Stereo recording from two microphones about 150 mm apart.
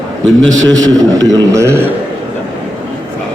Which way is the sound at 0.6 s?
25° right (ahead or behind).